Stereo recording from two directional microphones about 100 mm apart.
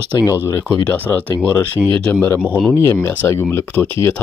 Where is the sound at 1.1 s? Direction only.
20° left (ahead or behind).